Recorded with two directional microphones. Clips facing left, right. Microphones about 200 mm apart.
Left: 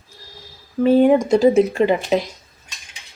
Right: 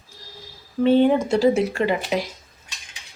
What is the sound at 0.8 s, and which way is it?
Speech, 5° left (ahead or behind).